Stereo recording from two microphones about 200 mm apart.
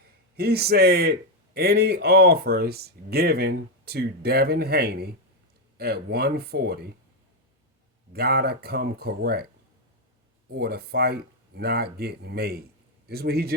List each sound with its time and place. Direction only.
0.3 s speech: 50° right (ahead or behind)
8.1 s speech: 50° right (ahead or behind)
10.5 s speech: 50° right (ahead or behind)